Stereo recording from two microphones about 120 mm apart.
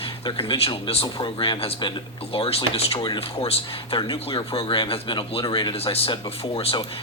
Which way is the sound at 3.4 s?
50° left (ahead or behind).